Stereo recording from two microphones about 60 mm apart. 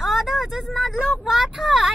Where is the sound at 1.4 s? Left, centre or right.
Centre.